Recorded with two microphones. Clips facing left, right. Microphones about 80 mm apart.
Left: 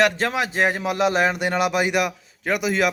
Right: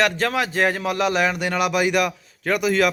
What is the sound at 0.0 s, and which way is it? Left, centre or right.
Speech, left.